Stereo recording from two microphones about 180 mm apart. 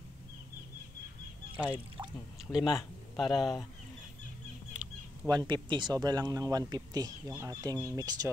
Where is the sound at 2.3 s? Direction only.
Centre (ahead or behind).